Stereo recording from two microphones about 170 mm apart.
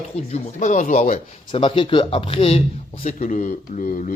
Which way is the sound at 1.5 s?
30° left (ahead or behind).